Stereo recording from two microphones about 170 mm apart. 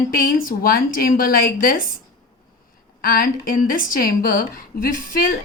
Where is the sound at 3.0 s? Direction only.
60° left (ahead or behind).